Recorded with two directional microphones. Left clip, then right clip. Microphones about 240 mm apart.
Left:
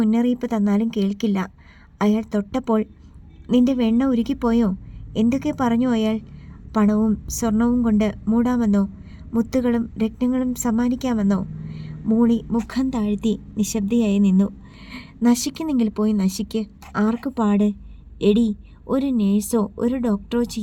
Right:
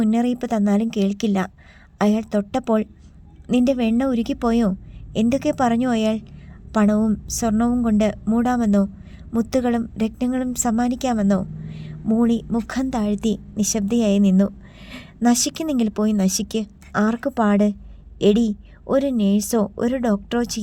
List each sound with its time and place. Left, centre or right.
0.0 s a woman's voice: right